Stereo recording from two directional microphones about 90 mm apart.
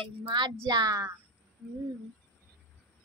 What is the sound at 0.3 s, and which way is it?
Speech, 60° right (ahead or behind).